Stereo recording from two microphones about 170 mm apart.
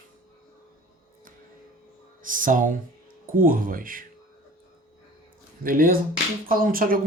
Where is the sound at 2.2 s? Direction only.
50° right (ahead or behind).